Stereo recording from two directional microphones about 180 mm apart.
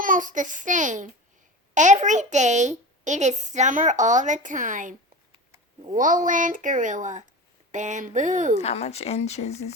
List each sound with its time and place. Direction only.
0.0 s a child's voice: 45° right (ahead or behind)
8.6 s speech: 35° left (ahead or behind)